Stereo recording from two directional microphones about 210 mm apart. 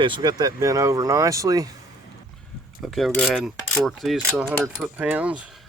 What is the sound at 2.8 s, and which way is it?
Mechanisms, centre (ahead or behind).